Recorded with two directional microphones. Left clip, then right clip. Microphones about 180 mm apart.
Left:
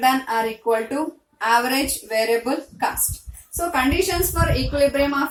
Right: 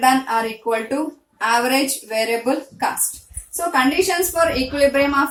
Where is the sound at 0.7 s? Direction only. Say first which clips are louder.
Even; 20° right (ahead or behind).